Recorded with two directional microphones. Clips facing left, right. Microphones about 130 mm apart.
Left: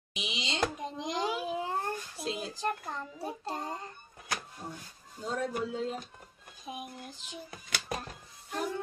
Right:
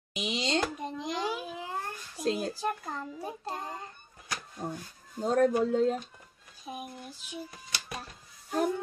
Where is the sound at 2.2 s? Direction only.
45° right (ahead or behind).